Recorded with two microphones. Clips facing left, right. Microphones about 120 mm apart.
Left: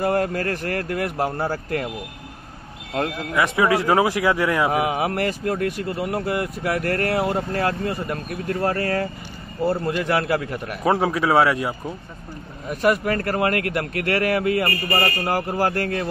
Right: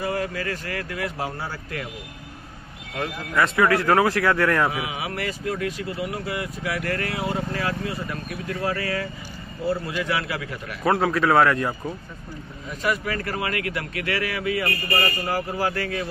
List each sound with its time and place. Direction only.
0.0 s speech: 50° left (ahead or behind)
3.3 s speech: 15° left (ahead or behind)
4.6 s speech: 50° left (ahead or behind)
10.8 s speech: 20° left (ahead or behind)
12.6 s speech: 55° left (ahead or behind)